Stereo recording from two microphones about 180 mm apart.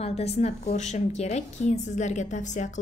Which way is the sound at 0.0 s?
35° left (ahead or behind).